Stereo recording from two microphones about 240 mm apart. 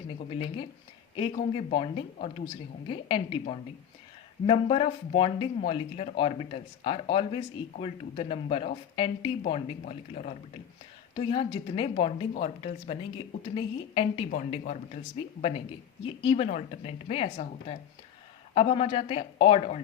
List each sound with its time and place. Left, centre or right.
0.2 s speech: left